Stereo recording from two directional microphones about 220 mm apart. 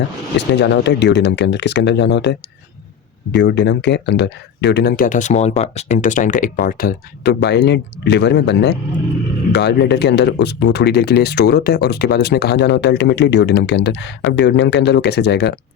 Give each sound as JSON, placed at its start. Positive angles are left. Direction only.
{"t": 0.3, "sound": "speech", "side_deg": 50}
{"t": 3.3, "sound": "speech", "side_deg": 50}